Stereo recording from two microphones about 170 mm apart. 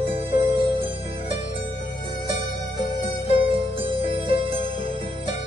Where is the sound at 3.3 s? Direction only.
30° right (ahead or behind).